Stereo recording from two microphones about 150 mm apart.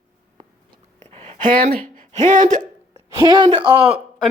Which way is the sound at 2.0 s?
60° right (ahead or behind).